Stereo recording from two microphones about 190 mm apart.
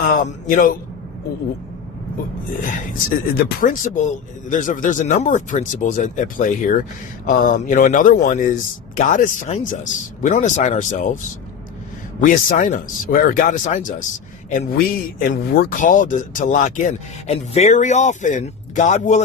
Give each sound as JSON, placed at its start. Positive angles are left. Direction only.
{"t": 0.0, "sound": "a man's voice", "side_deg": 45}
{"t": 3.3, "sound": "speech", "side_deg": 45}
{"t": 12.2, "sound": "speech", "side_deg": 40}